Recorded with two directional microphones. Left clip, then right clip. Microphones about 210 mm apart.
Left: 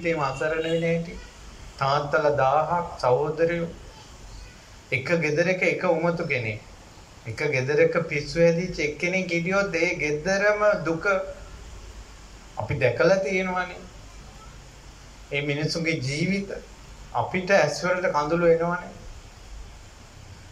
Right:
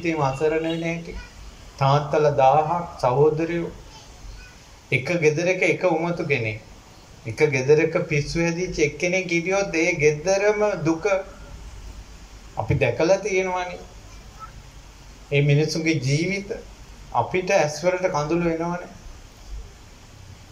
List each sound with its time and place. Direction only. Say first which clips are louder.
0.0 s speech: right 3 dB; 15° right (ahead or behind)
4.8 s speech: right 4 dB; 15° right (ahead or behind)
12.6 s speech: even; 15° right (ahead or behind)
15.3 s speech: right 5 dB; 15° right (ahead or behind)